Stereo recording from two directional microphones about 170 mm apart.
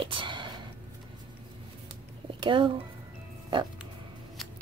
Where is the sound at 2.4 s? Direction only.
30° right (ahead or behind).